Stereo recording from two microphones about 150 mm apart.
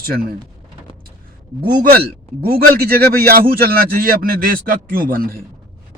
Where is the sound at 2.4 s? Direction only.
90° right.